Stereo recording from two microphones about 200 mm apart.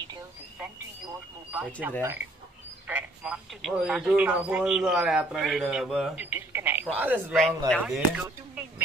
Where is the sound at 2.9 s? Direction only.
5° right (ahead or behind).